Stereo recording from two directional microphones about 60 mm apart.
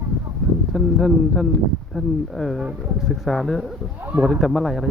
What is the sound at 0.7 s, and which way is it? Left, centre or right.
Speech, centre.